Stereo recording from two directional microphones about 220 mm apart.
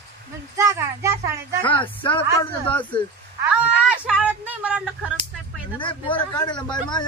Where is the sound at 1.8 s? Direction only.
20° left (ahead or behind).